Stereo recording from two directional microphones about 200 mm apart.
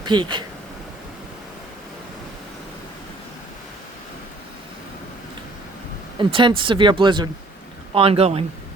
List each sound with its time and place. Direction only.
0.0 s speech: 25° right (ahead or behind)
6.1 s speech: 25° right (ahead or behind)